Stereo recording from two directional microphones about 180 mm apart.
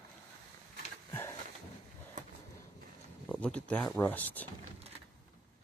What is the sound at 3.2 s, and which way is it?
Speech, centre (ahead or behind).